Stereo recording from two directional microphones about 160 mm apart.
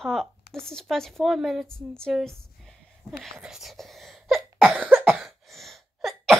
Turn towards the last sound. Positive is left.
turn(degrees=0)  # may be behind; listen again after turning